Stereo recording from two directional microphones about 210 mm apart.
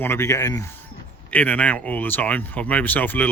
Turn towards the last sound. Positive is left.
turn(degrees=10)  # may be behind; listen again after turning